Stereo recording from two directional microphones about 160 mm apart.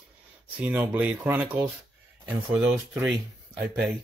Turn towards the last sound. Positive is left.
turn(degrees=-10)  # may be behind; listen again after turning